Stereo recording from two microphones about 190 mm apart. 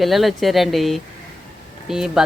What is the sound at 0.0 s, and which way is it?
Speech, centre (ahead or behind).